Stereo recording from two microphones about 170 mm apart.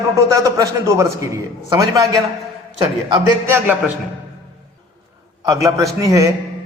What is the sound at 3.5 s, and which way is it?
Speech, 10° right (ahead or behind).